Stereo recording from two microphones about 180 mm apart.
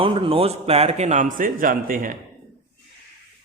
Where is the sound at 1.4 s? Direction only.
50° right (ahead or behind).